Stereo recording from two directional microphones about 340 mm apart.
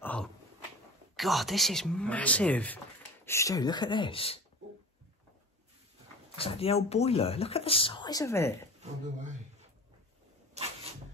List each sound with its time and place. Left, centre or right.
0.0 s a sound: centre
1.1 s speech: centre
6.3 s speech: centre